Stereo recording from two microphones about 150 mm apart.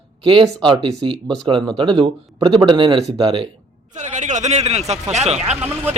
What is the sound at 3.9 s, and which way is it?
Speech, 55° right (ahead or behind).